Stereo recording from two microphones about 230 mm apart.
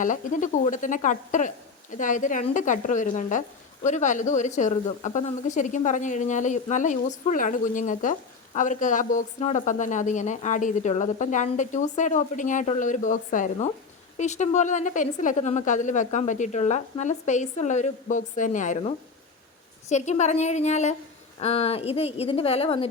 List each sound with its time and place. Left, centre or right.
0.0 s a woman's voice: left